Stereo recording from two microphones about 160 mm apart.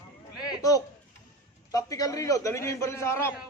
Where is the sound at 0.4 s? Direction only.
20° left (ahead or behind).